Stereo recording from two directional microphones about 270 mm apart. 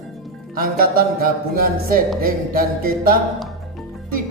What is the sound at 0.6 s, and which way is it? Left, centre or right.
Speech, right.